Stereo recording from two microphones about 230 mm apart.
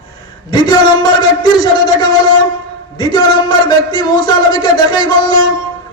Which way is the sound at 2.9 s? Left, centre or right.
Centre.